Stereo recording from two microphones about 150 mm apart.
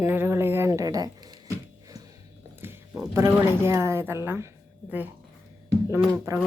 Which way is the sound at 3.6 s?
15° right (ahead or behind).